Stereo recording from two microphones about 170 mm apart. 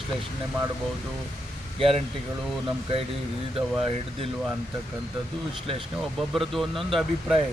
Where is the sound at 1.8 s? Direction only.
35° right (ahead or behind).